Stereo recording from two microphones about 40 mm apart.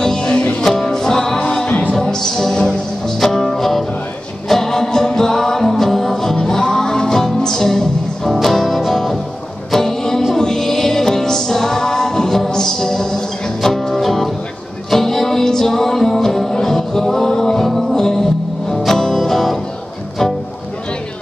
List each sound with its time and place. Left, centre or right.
0.0 s music: centre
1.7 s music: left
2.0 s music: centre